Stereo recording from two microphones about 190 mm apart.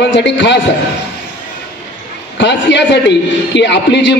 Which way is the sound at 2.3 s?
65° left (ahead or behind).